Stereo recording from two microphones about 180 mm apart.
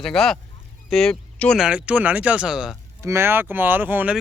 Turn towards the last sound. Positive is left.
turn(degrees=-10)  # may be behind; listen again after turning